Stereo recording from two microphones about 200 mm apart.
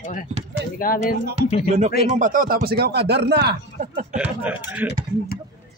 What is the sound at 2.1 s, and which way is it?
Speech, 40° right (ahead or behind).